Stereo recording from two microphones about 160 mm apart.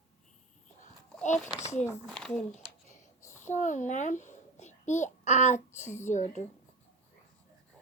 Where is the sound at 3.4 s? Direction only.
50° left (ahead or behind).